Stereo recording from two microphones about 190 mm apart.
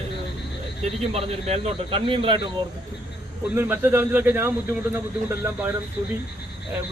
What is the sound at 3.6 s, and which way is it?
Speech, 10° right (ahead or behind).